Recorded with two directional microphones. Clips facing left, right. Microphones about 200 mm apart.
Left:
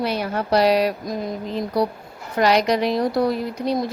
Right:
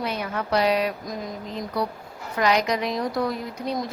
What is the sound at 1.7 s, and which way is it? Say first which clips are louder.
Speech: left 6 dB; 35° left (ahead or behind).